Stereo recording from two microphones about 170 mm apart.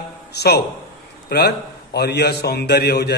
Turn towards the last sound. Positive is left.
turn(degrees=70)  # may be behind; listen again after turning